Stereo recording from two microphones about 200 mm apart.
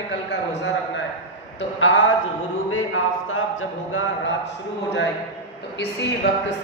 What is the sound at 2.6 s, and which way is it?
Speech, 90° left.